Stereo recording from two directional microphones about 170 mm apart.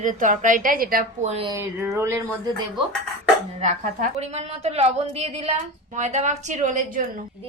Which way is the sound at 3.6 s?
40° right (ahead or behind).